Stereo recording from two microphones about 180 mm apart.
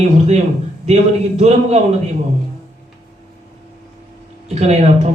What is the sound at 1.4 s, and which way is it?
Speech, 40° right (ahead or behind).